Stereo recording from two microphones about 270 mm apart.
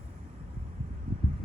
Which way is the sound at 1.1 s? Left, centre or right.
Centre.